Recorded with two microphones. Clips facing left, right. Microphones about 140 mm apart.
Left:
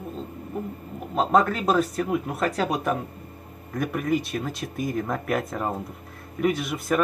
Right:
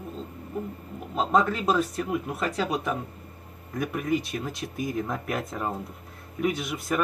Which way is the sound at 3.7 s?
50° left (ahead or behind).